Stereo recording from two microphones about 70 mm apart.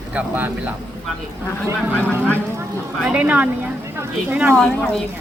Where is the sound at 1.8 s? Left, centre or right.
Right.